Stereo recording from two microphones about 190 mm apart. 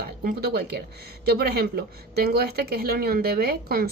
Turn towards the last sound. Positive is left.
turn(degrees=-55)  # may be behind; listen again after turning